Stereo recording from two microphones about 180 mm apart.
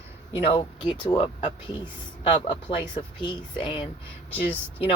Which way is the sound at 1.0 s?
30° left (ahead or behind).